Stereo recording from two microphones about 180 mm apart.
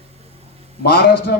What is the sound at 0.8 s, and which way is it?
Speech, 60° left (ahead or behind).